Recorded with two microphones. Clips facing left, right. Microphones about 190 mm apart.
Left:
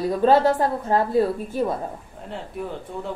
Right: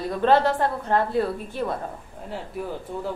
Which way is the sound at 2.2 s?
Centre (ahead or behind).